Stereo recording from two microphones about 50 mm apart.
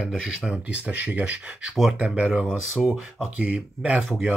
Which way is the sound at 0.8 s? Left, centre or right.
Right.